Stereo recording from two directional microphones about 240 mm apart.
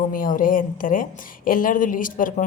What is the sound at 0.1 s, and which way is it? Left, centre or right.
Speech, left.